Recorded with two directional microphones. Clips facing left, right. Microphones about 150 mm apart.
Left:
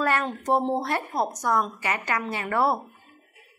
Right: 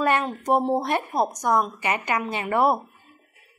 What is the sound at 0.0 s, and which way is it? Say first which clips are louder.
A woman's voice: right 2 dB; 15° right (ahead or behind).